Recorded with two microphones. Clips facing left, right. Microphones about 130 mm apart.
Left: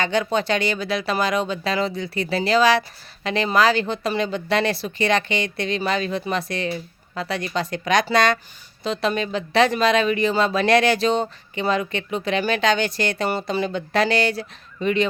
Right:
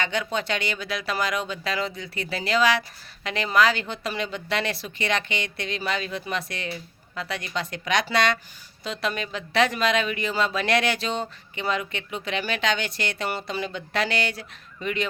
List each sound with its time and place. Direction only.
0.0 s speech: 35° left (ahead or behind)
8.8 s speech: 30° left (ahead or behind)